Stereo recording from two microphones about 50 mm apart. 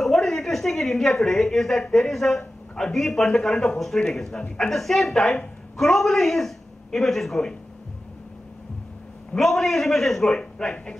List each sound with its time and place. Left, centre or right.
0.0 s a woman's voice: centre
9.4 s a man's voice: centre
10.6 s a man's voice: centre